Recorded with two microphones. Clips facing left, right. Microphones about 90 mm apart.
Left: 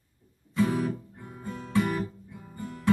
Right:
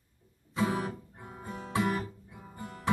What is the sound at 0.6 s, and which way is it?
Music, 15° right (ahead or behind).